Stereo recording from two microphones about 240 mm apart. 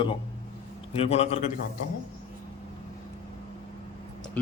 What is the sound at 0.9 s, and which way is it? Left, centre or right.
Speech, left.